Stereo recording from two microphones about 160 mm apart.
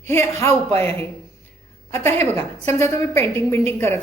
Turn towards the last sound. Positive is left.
turn(degrees=15)  # may be behind; listen again after turning